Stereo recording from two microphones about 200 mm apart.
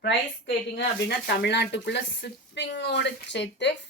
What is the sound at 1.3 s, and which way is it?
Speech, 60° left (ahead or behind).